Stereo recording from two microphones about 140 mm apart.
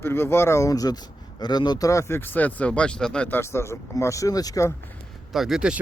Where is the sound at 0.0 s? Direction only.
15° left (ahead or behind).